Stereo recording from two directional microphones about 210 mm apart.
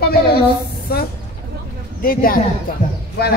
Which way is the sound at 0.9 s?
45° left (ahead or behind).